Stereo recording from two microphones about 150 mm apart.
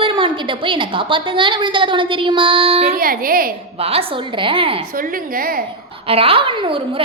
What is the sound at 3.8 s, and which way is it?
Speech, 40° right (ahead or behind).